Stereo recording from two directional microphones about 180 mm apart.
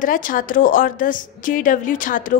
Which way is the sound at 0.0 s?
50° left (ahead or behind).